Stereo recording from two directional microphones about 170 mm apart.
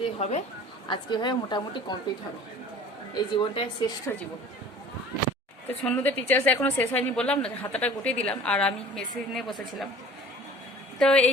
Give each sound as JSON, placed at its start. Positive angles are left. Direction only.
{"t": 0.0, "sound": "a woman's voice", "side_deg": 40}
{"t": 0.9, "sound": "a woman's voice", "side_deg": 25}
{"t": 3.2, "sound": "a woman's voice", "side_deg": 30}
{"t": 5.8, "sound": "a woman's voice", "side_deg": 10}
{"t": 11.0, "sound": "a woman's voice", "side_deg": 5}